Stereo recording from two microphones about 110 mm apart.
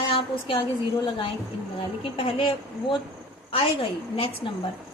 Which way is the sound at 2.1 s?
55° left (ahead or behind).